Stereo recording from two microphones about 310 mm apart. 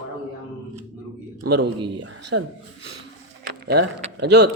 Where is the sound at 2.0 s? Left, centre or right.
Right.